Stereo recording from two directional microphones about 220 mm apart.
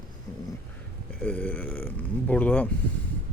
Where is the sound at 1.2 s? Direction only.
5° left (ahead or behind).